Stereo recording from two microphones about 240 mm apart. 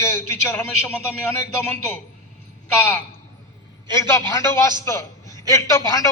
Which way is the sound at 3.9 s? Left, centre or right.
Centre.